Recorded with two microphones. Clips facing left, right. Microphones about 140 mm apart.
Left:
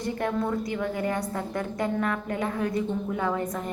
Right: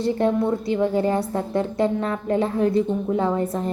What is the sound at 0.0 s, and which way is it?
Speech, 25° right (ahead or behind).